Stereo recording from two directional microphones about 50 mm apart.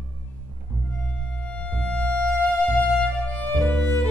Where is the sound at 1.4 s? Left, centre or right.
Left.